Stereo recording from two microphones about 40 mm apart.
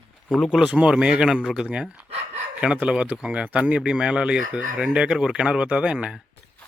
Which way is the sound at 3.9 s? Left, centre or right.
Right.